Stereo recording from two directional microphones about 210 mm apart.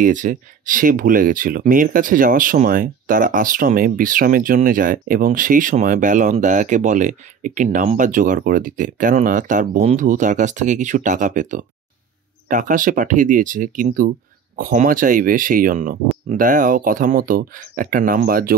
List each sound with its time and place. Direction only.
0.0 s speech: 40° right (ahead or behind)